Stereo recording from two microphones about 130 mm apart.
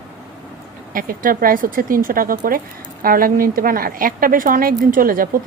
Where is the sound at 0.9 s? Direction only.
90° right.